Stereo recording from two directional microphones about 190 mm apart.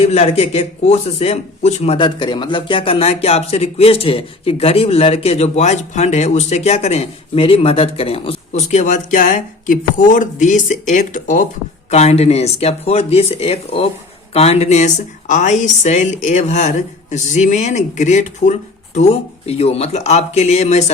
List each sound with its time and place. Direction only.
0.0 s a man's voice: 30° left (ahead or behind)